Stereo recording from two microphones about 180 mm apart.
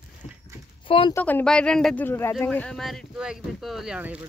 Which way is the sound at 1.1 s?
10° left (ahead or behind).